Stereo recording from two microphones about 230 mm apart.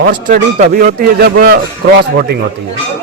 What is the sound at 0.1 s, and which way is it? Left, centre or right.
A man's voice, right.